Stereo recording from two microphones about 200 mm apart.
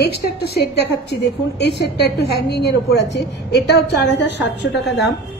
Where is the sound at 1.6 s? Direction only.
55° left (ahead or behind).